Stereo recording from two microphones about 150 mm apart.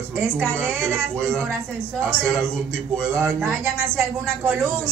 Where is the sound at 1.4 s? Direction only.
15° right (ahead or behind).